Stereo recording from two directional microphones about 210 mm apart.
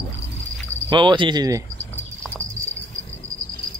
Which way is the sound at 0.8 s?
20° right (ahead or behind).